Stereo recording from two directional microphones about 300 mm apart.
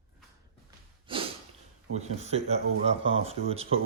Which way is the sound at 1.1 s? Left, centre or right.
Centre.